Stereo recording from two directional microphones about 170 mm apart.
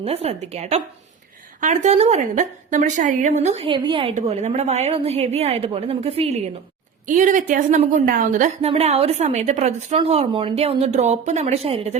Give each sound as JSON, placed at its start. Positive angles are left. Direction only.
{"t": 0.0, "sound": "a woman's voice", "side_deg": -35}
{"t": 7.1, "sound": "a woman's voice", "side_deg": -50}